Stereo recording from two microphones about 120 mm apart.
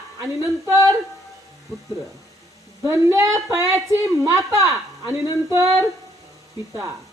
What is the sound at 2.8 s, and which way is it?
Speech, 20° right (ahead or behind).